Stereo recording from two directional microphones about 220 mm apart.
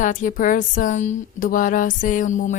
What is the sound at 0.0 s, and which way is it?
A woman's voice, 35° left (ahead or behind).